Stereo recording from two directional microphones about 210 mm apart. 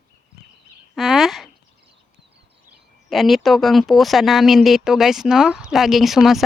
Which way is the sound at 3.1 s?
Centre (ahead or behind).